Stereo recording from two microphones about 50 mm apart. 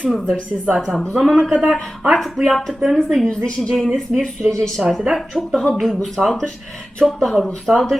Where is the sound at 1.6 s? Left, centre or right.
Centre.